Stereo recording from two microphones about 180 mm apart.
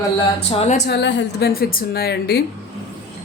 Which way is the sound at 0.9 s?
75° left (ahead or behind).